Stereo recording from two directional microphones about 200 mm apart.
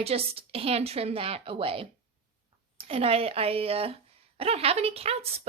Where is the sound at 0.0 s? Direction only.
30° right (ahead or behind).